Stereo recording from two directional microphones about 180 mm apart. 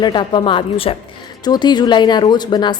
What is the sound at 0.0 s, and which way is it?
Speech, 25° left (ahead or behind).